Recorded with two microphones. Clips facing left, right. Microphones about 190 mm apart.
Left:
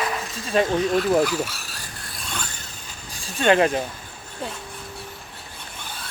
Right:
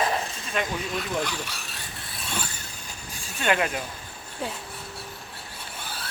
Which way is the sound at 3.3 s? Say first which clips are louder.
Left 7 dB; 30° left (ahead or behind).